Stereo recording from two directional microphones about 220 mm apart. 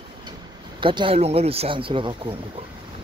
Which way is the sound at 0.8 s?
25° right (ahead or behind).